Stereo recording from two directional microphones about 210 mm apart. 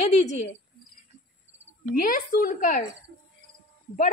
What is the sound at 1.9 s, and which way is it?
Speech, 40° left (ahead or behind).